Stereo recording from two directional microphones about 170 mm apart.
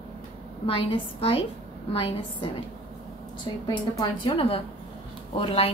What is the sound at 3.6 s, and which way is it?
A woman's voice, 25° left (ahead or behind).